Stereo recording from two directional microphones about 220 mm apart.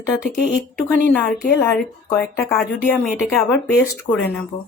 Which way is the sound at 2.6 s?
Centre (ahead or behind).